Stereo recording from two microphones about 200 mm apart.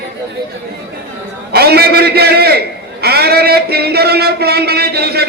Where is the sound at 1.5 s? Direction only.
50° right (ahead or behind).